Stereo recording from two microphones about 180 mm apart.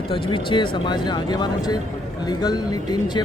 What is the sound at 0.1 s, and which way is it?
Speech, 30° left (ahead or behind).